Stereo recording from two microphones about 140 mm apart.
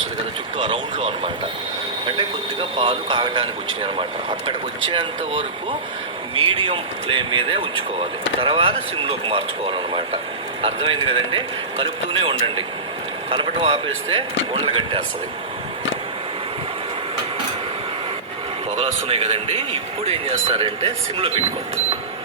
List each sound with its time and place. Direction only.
2.1 s speech: 40° right (ahead or behind)
19.0 s speech: 45° right (ahead or behind)